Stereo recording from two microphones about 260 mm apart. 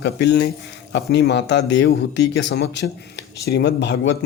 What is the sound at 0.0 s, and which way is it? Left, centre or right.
Speech, left.